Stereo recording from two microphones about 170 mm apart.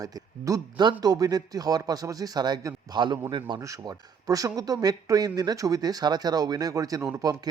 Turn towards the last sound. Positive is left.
turn(degrees=-20)  # may be behind; listen again after turning